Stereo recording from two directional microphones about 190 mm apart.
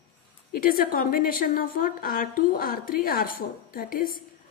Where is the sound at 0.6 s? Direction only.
45° left (ahead or behind).